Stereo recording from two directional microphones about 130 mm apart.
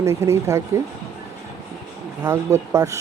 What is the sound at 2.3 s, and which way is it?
Speech, 25° right (ahead or behind).